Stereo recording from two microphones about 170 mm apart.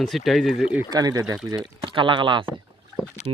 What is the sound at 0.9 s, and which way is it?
Speech, 20° right (ahead or behind).